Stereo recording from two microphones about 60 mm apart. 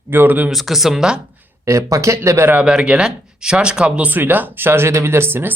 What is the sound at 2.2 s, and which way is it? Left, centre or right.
Speech, right.